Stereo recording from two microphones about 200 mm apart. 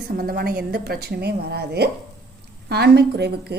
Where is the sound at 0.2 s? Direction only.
50° right (ahead or behind).